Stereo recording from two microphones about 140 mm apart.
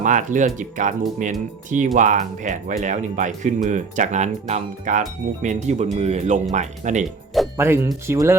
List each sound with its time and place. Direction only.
0.0 s speech: 65° right (ahead or behind)
7.5 s speech: 20° right (ahead or behind)